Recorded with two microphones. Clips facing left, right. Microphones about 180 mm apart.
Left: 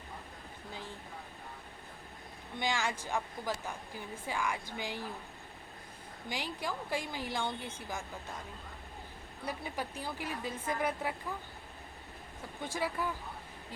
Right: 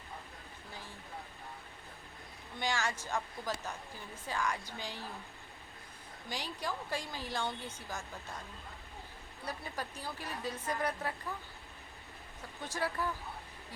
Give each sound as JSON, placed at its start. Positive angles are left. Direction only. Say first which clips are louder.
{"t": 2.6, "sound": "speech", "louder": "left 1 dB", "side_deg": 15}
{"t": 6.2, "sound": "speech", "louder": "left 2 dB", "side_deg": 15}
{"t": 9.5, "sound": "speech", "louder": "left 3 dB", "side_deg": 15}
{"t": 12.7, "sound": "speech", "louder": "left 1 dB", "side_deg": 15}